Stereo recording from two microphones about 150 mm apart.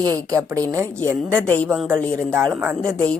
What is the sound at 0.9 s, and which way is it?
Speech, 10° left (ahead or behind).